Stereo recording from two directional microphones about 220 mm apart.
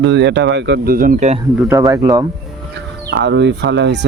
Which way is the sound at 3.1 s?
50° right (ahead or behind).